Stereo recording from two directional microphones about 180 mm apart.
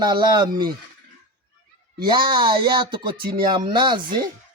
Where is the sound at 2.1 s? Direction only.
25° right (ahead or behind).